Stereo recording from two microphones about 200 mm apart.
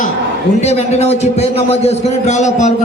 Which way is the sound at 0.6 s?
35° left (ahead or behind).